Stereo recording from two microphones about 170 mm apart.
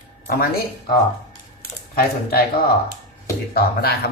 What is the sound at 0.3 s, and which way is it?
Speech, 65° left (ahead or behind).